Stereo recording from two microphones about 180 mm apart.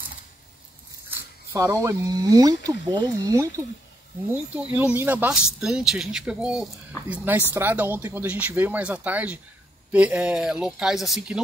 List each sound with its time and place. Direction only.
1.1 s speech: 15° right (ahead or behind)